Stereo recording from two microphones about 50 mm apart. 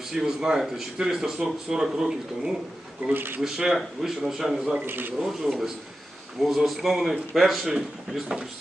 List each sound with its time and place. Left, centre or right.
0.1 s speech: centre
3.1 s speech: right
3.4 s speech: centre
4.9 s speech: right
5.2 s a man's voice: centre